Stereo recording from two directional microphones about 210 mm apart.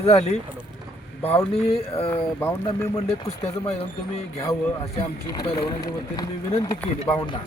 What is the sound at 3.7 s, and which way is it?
Speech, 30° left (ahead or behind).